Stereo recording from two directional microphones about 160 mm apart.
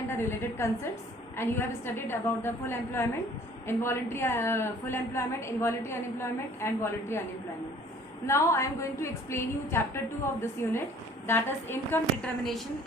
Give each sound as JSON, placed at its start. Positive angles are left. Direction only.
{"t": 0.1, "sound": "a woman's voice", "side_deg": 15}
{"t": 8.3, "sound": "a woman's voice", "side_deg": 20}